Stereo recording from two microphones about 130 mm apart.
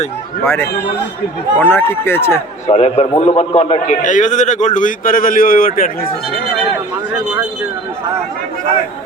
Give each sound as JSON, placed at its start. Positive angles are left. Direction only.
{"t": 0.4, "sound": "speech", "side_deg": 15}
{"t": 2.6, "sound": "a man's voice", "side_deg": 55}